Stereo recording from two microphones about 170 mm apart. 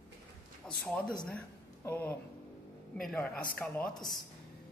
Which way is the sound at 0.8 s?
5° left (ahead or behind).